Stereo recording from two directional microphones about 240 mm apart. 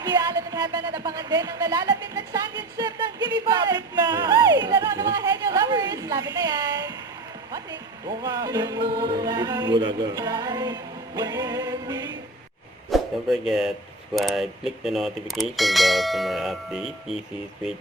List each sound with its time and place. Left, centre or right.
0.0 s music: centre
8.2 s music: centre
8.9 s music: right
9.2 s music: centre
12.9 s speech: centre